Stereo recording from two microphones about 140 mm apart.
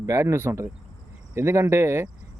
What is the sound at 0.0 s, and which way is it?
Speech, 20° right (ahead or behind).